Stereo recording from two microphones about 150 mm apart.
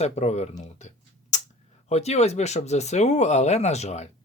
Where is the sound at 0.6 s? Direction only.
50° left (ahead or behind).